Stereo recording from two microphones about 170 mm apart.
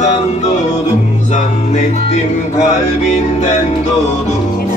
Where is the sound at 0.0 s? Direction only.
40° left (ahead or behind).